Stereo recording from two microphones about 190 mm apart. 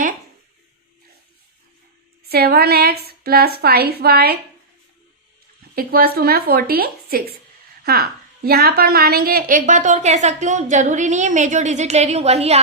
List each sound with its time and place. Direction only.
2.3 s a woman's voice: 55° right (ahead or behind)
5.7 s a woman's voice: 50° right (ahead or behind); by 12.5 s 35° right (ahead or behind)